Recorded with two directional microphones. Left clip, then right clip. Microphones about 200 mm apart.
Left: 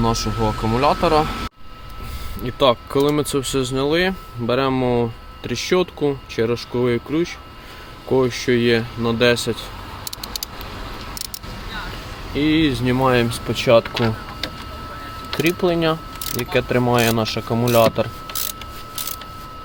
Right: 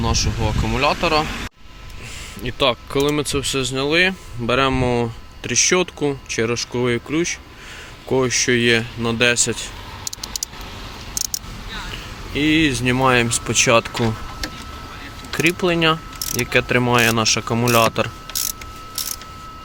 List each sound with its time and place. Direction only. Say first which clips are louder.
0.0 s speech: left 2 dB; 20° left (ahead or behind)
2.4 s speech: left 2 dB; 5° left (ahead or behind)
12.3 s speech: right 1 dB; 5° left (ahead or behind)
15.4 s speech: right 1 dB; centre (ahead or behind)